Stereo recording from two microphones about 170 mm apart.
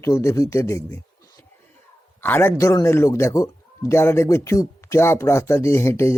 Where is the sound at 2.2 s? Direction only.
10° left (ahead or behind).